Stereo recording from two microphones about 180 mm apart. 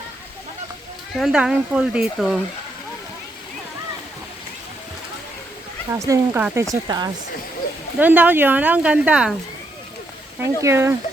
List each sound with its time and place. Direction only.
1.1 s speech: centre (ahead or behind)
5.9 s speech: 15° right (ahead or behind)
7.9 s speech: 10° right (ahead or behind)
10.4 s speech: 15° right (ahead or behind)